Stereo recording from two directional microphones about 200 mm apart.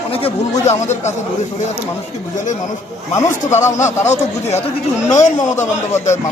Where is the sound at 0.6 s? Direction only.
35° left (ahead or behind).